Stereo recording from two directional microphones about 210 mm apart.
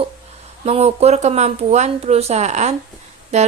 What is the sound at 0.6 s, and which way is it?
A woman's voice, 30° right (ahead or behind).